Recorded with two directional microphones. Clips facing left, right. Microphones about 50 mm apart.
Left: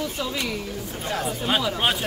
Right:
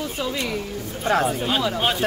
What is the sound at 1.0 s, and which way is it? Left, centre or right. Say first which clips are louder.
Speech: right 8 dB; right.